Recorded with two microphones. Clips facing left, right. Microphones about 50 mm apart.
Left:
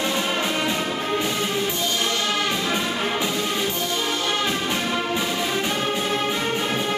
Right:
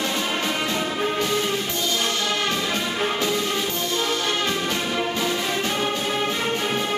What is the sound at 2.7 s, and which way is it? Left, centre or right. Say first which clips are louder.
Music: even; centre.